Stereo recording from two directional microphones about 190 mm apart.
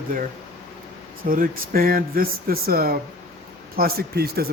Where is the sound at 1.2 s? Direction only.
50° right (ahead or behind).